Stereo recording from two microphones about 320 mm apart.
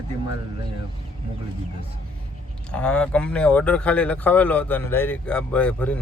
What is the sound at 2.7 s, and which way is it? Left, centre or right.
Speech, centre.